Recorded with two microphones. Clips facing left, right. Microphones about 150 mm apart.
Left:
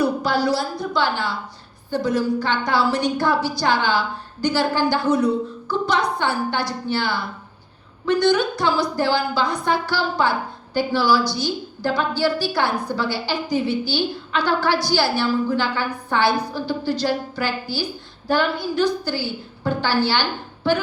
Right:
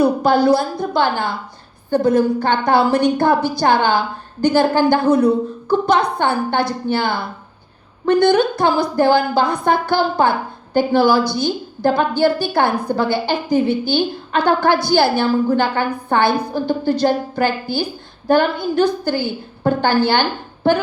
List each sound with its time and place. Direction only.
0.0 s a woman's voice: 55° right (ahead or behind)